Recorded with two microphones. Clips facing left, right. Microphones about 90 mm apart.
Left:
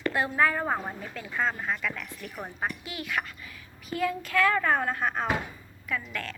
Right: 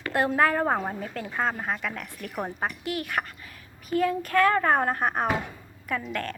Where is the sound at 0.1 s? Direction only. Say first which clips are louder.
Right 6 dB; 55° right (ahead or behind).